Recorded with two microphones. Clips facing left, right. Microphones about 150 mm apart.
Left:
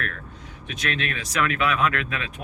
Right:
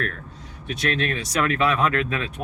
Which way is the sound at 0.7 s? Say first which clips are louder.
Right 4 dB; 35° right (ahead or behind).